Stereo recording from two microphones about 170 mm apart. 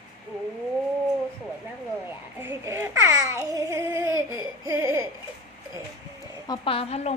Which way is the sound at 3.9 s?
15° right (ahead or behind).